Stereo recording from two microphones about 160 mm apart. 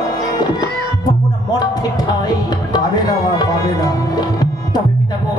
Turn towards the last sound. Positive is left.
turn(degrees=25)  # may be behind; listen again after turning